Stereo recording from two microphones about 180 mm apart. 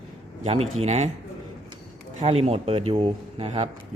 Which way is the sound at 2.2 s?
35° right (ahead or behind).